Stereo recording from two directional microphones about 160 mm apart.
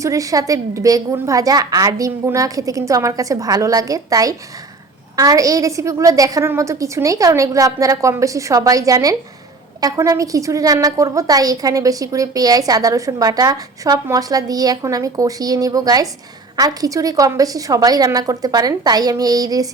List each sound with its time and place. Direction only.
0.0 s a woman's voice: 20° right (ahead or behind)